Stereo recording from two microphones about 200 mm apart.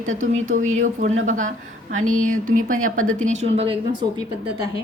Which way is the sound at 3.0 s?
35° right (ahead or behind).